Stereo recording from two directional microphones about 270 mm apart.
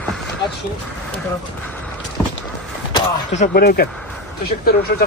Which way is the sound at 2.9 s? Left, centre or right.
Left.